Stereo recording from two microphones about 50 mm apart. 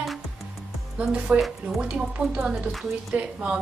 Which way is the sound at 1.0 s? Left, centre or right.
Right.